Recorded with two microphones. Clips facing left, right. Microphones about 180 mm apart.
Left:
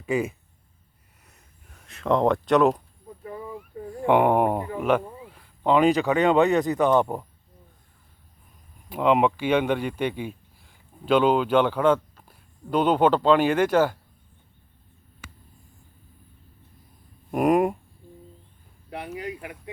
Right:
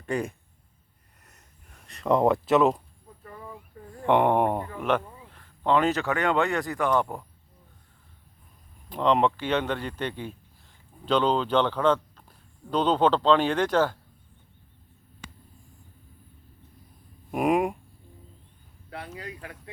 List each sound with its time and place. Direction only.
0.0 s speech: 5° left (ahead or behind)
1.2 s gasp: centre (ahead or behind)
4.0 s speech: 5° left (ahead or behind)
8.9 s speech: 10° left (ahead or behind)
17.3 s speech: centre (ahead or behind)
18.9 s speech: 20° left (ahead or behind)